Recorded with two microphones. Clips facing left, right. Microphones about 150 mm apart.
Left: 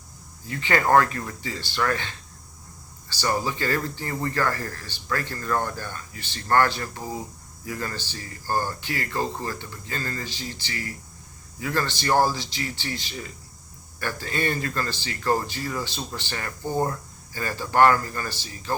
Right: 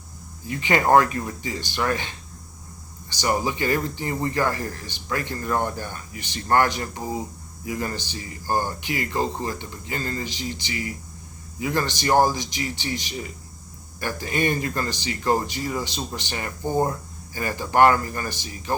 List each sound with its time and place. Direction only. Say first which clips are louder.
0.4 s a man's voice: right 2 dB; 15° right (ahead or behind)